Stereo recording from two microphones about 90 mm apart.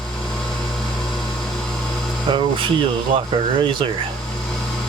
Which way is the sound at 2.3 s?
65° right (ahead or behind).